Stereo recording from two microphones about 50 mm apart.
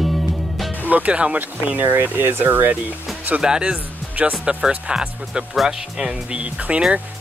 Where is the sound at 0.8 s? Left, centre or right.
Right.